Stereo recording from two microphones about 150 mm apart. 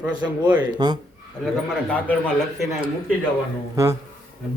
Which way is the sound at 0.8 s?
25° right (ahead or behind).